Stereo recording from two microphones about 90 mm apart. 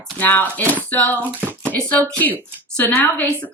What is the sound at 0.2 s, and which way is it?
Speech, 20° left (ahead or behind).